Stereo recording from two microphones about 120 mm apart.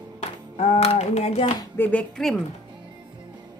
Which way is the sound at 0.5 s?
65° left (ahead or behind).